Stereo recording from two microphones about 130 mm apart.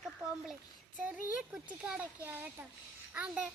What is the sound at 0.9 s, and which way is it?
Speech, 10° right (ahead or behind).